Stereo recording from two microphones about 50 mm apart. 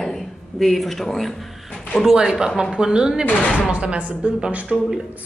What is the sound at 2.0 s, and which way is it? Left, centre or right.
Speech, centre.